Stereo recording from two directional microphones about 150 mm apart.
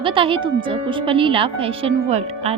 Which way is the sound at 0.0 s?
35° right (ahead or behind).